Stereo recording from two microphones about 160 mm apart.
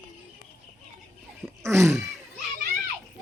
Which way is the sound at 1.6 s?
15° right (ahead or behind).